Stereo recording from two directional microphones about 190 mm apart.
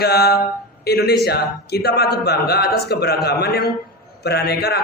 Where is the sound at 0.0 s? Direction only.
55° left (ahead or behind).